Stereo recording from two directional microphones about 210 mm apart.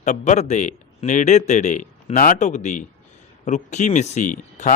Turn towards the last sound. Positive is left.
turn(degrees=35)  # may be behind; listen again after turning